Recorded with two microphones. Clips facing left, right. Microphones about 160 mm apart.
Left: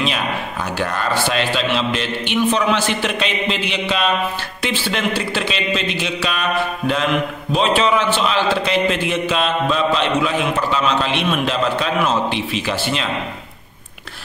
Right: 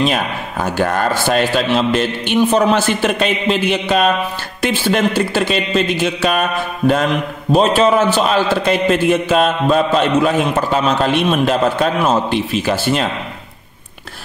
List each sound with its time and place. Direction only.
0.0 s a man's voice: 45° right (ahead or behind)